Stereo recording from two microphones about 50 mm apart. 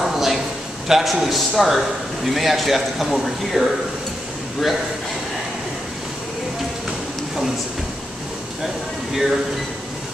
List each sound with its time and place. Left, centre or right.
0.0 s a sound: centre
0.8 s speech: centre
9.1 s speech: centre